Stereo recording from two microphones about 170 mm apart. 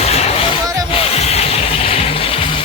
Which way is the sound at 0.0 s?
40° left (ahead or behind).